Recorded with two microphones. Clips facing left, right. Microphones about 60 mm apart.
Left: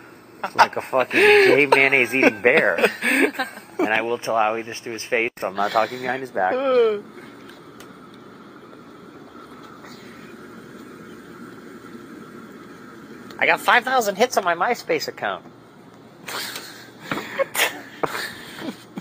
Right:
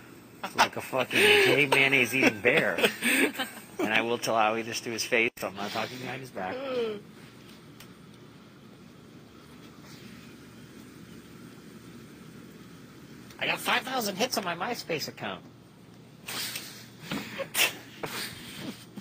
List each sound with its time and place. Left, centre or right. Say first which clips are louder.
0.4 s speech: left 9 dB; left
4.0 s speech: left 5 dB; left
5.5 s speech: left 13 dB; left
13.4 s speech: left 12 dB; left
16.3 s sneeze: left 8 dB; left